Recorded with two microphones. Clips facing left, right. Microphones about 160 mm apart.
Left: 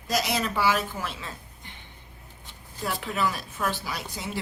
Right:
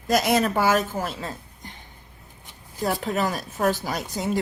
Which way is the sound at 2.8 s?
40° right (ahead or behind).